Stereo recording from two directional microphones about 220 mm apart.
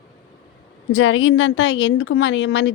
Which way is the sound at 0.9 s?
65° left (ahead or behind).